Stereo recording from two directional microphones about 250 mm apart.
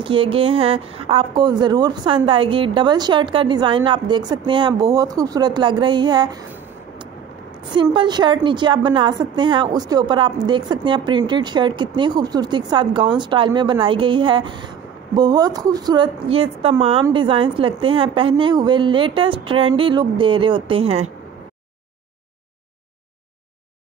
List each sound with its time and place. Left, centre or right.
0.0 s speech: right
7.7 s speech: centre